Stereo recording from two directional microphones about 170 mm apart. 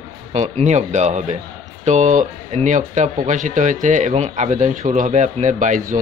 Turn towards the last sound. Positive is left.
turn(degrees=-50)  # may be behind; listen again after turning